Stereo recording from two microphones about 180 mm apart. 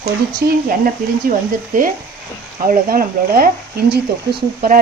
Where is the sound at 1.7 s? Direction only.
50° right (ahead or behind).